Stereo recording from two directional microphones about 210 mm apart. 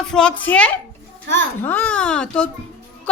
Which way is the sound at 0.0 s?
5° left (ahead or behind).